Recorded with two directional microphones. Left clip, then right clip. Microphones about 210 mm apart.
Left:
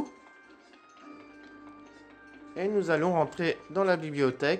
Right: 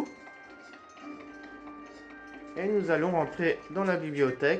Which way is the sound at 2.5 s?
50° left (ahead or behind).